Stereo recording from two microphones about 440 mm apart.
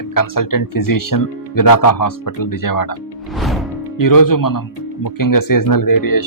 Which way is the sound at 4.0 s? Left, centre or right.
Left.